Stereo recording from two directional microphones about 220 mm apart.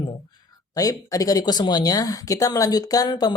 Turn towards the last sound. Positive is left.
turn(degrees=20)  # may be behind; listen again after turning